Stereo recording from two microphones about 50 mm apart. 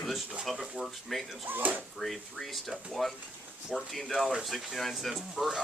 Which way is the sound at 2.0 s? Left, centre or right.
Centre.